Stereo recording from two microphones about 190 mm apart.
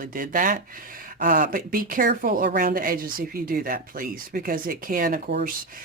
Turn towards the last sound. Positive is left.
turn(degrees=-50)  # may be behind; listen again after turning